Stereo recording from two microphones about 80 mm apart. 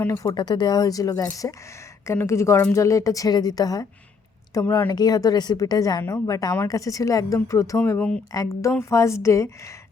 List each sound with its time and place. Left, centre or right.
0.3 s speech: left
4.6 s a woman's voice: left
4.9 s a woman's voice: left
6.0 s speech: left
7.9 s speech: centre
8.3 s speech: left